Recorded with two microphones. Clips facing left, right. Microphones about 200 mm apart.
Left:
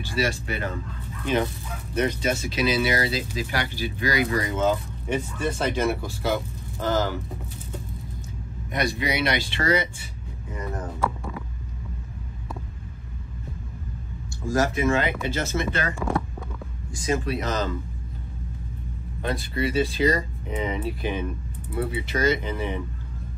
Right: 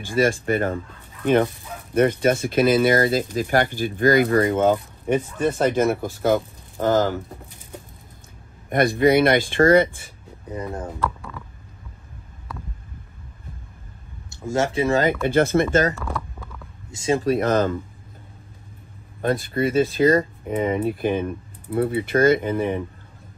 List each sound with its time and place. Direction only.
0.0 s speech: 50° right (ahead or behind)
1.2 s fowl: 55° right (ahead or behind)
2.0 s speech: 55° right (ahead or behind)
8.6 s speech: 50° right (ahead or behind)
10.5 s speech: 30° right (ahead or behind)
14.4 s speech: 25° right (ahead or behind); by 15.9 s 50° right (ahead or behind)
16.9 s speech: 25° right (ahead or behind)
17.2 s speech: 50° right (ahead or behind)
19.2 s speech: 50° right (ahead or behind)